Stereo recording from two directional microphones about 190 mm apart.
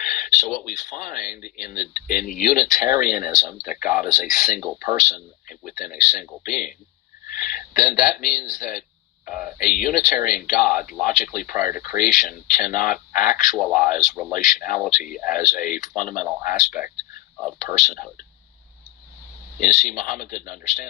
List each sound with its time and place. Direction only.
0.0 s speech: 45° left (ahead or behind)
7.3 s hiccup: 45° left (ahead or behind)
9.2 s speech: 45° left (ahead or behind)
13.6 s speech: centre (ahead or behind)
13.9 s speech: 45° left (ahead or behind)
19.5 s speech: 45° left (ahead or behind)